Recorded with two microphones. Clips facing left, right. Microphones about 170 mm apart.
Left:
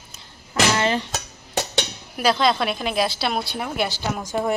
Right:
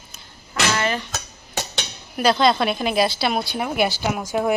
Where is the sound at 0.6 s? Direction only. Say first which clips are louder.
Left 1 dB; 20° left (ahead or behind).